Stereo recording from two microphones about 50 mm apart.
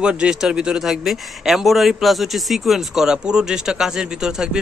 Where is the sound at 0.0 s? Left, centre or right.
Centre.